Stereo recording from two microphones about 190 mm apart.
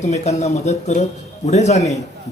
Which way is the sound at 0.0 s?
35° left (ahead or behind).